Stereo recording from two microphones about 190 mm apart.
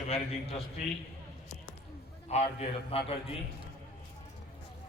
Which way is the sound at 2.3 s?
35° left (ahead or behind).